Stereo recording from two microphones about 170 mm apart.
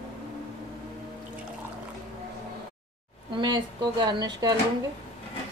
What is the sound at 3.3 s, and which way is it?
Speech, 25° right (ahead or behind).